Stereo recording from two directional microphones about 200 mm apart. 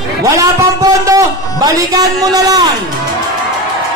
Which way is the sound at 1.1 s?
15° right (ahead or behind).